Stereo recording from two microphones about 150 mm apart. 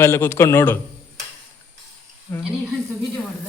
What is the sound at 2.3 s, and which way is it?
Speech, 15° left (ahead or behind).